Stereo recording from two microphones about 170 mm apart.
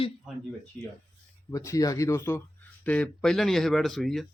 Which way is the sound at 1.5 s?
20° left (ahead or behind).